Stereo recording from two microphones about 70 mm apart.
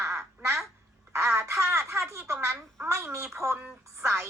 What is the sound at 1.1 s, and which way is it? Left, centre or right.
Speech, right.